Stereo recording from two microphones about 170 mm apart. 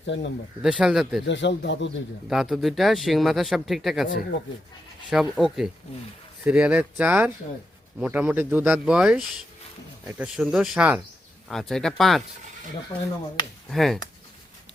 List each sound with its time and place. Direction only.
0.0 s speech: 90° left
0.6 s speech: 5° right (ahead or behind)
1.2 s speech: 90° left
2.3 s speech: centre (ahead or behind)
5.1 s speech: centre (ahead or behind)
12.9 s speech: 25° left (ahead or behind)
13.7 s speech: centre (ahead or behind)